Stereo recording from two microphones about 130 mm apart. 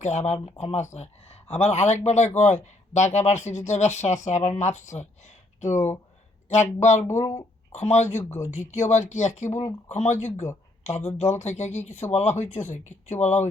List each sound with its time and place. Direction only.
0.0 s speech: 65° left (ahead or behind)
7.1 s speech: 20° left (ahead or behind)
7.7 s speech: 60° left (ahead or behind)